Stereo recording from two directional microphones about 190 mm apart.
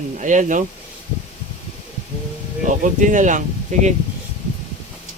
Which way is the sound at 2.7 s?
45° right (ahead or behind).